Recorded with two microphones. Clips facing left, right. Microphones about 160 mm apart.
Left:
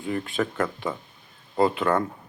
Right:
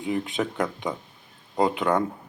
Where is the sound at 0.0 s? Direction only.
20° right (ahead or behind).